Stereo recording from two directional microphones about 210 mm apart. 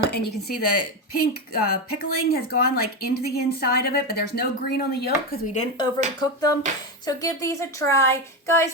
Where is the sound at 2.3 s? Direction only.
45° left (ahead or behind).